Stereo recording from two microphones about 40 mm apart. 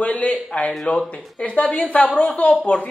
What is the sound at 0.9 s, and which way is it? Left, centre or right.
Speech, left.